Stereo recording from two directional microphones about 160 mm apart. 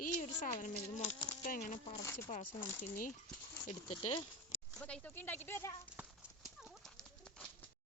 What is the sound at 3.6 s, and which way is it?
Speech, 40° left (ahead or behind).